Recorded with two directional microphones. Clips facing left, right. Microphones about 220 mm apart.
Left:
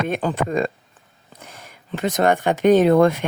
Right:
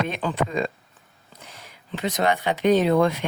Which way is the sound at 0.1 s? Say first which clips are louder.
Left 4 dB; 45° left (ahead or behind).